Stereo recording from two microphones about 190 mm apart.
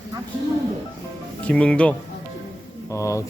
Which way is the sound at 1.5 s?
5° left (ahead or behind).